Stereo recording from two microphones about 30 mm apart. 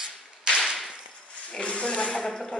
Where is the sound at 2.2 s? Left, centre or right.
Left.